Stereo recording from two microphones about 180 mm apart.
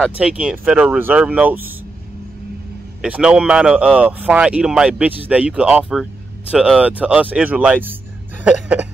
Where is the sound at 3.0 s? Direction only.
5° right (ahead or behind).